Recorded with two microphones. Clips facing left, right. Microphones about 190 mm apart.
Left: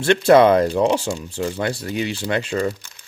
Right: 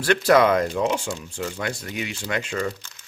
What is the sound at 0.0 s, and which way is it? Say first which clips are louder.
Speech: left 5 dB; 25° left (ahead or behind).